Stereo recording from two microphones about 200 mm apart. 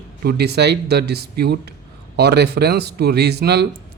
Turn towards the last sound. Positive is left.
turn(degrees=-55)  # may be behind; listen again after turning